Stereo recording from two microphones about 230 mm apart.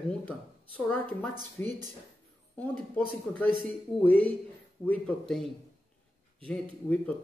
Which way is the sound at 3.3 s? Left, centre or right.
Centre.